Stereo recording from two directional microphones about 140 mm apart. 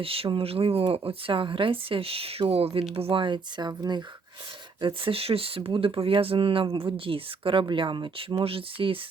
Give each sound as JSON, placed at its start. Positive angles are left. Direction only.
{"t": 0.0, "sound": "speech", "side_deg": -40}